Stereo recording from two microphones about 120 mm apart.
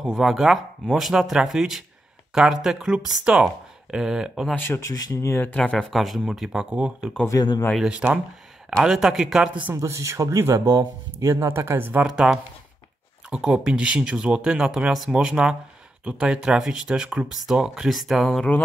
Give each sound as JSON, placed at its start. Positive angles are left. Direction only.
{"t": 0.1, "sound": "speech", "side_deg": 0}
{"t": 4.6, "sound": "speech", "side_deg": 20}
{"t": 7.2, "sound": "speech", "side_deg": 30}
{"t": 7.7, "sound": "speech", "side_deg": -5}
{"t": 9.8, "sound": "speech", "side_deg": -25}